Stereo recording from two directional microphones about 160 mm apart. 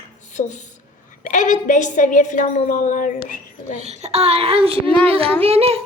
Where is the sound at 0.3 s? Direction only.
50° left (ahead or behind).